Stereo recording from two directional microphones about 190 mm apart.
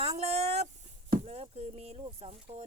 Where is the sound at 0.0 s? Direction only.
30° right (ahead or behind).